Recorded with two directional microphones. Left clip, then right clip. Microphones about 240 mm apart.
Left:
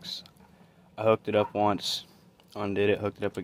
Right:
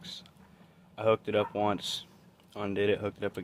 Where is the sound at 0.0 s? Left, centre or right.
Left.